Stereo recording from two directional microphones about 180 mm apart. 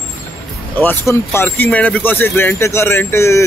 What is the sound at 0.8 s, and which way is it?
Speech, 15° left (ahead or behind).